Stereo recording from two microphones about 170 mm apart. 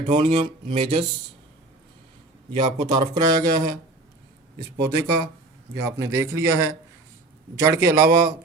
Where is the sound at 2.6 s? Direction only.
25° right (ahead or behind).